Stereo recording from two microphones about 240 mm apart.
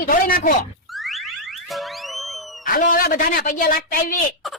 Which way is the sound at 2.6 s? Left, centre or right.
Left.